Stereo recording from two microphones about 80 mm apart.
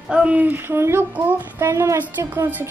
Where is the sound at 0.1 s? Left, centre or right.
Centre; by 2.0 s right.